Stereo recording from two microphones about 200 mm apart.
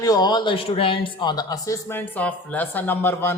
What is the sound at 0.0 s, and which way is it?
Speech, 20° left (ahead or behind).